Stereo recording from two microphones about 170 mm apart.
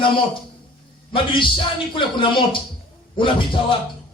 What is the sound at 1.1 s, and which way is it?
A man's voice, 30° left (ahead or behind).